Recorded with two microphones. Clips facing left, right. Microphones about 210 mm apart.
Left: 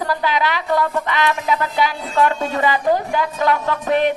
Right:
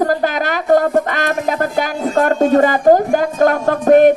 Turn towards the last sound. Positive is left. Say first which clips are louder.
# right 9 dB
turn(degrees=-45)  # may be behind; listen again after turning